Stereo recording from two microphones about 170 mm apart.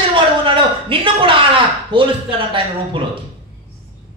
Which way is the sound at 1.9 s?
30° right (ahead or behind).